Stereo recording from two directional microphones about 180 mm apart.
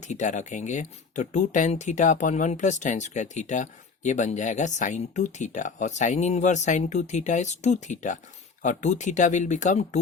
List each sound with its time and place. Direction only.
0.0 s speech: 40° left (ahead or behind)